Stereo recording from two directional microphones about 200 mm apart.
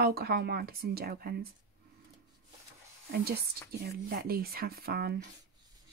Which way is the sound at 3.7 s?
50° right (ahead or behind).